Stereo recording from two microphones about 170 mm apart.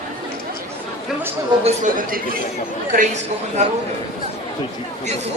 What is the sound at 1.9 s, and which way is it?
Speech, 55° right (ahead or behind).